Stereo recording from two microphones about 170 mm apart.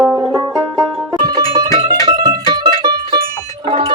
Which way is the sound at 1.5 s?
25° right (ahead or behind).